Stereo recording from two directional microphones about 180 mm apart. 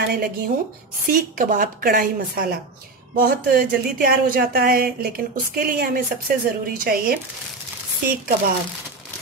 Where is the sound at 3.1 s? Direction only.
55° right (ahead or behind).